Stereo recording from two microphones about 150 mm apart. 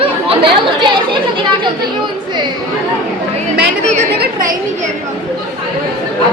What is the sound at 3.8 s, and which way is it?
Chatter, 50° right (ahead or behind).